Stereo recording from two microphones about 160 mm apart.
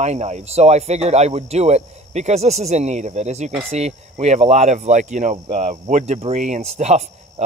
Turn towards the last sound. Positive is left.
turn(degrees=-45)  # may be behind; listen again after turning